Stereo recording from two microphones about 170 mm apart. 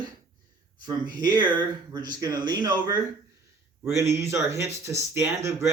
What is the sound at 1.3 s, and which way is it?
A man's voice, 25° right (ahead or behind).